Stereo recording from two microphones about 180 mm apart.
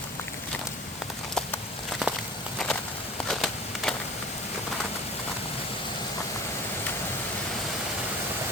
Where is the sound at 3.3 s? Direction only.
Centre (ahead or behind).